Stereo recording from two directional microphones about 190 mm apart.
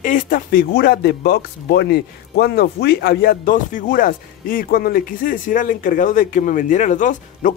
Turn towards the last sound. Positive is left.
turn(degrees=40)  # may be behind; listen again after turning